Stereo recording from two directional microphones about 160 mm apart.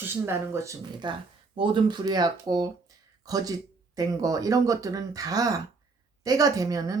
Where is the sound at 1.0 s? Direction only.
30° right (ahead or behind).